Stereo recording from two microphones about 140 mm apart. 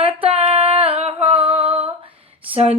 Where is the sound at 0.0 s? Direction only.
45° right (ahead or behind).